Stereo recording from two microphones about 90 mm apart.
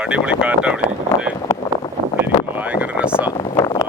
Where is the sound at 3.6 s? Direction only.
45° left (ahead or behind).